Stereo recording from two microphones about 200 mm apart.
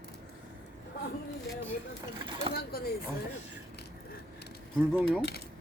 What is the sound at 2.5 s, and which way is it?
Speech, 50° left (ahead or behind).